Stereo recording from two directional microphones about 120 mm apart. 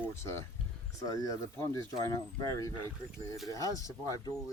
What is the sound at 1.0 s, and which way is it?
Speech, 30° left (ahead or behind).